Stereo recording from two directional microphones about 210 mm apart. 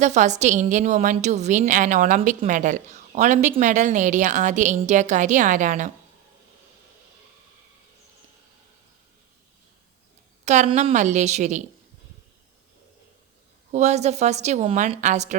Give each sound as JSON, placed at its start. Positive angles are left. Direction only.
{"t": 0.0, "sound": "a woman's voice", "side_deg": -35}
{"t": 10.4, "sound": "a woman's voice", "side_deg": -35}
{"t": 13.7, "sound": "a woman's voice", "side_deg": -30}